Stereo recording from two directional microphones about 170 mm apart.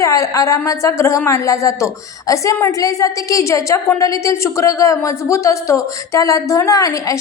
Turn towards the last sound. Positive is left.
turn(degrees=20)  # may be behind; listen again after turning